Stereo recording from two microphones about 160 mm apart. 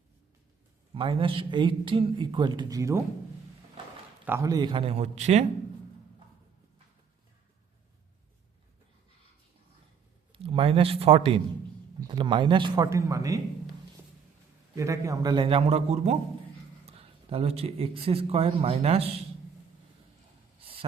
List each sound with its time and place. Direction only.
0.9 s speech: 35° right (ahead or behind)
4.3 s speech: 25° right (ahead or behind); by 5.5 s 40° right (ahead or behind)
10.3 s a man's voice: 35° right (ahead or behind)
14.8 s a man's voice: 20° right (ahead or behind); by 19.0 s 40° right (ahead or behind)